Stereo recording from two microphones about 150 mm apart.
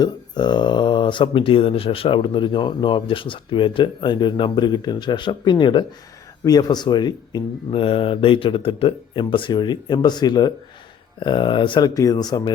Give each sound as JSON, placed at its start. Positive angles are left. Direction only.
{"t": 0.0, "sound": "speech", "side_deg": 30}